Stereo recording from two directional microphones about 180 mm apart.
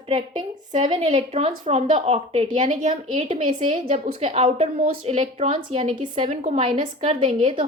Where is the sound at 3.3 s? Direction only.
30° right (ahead or behind).